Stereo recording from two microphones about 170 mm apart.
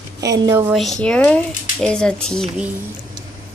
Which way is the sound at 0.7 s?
Centre (ahead or behind).